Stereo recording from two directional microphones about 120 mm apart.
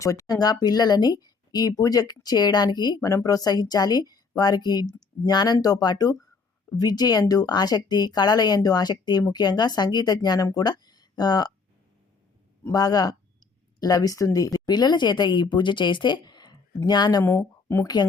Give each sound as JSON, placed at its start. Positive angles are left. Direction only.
{"t": 0.0, "sound": "speech", "side_deg": 25}
{"t": 12.7, "sound": "speech", "side_deg": 35}
{"t": 17.2, "sound": "speech", "side_deg": 20}